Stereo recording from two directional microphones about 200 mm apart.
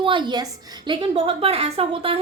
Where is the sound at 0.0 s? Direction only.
25° right (ahead or behind).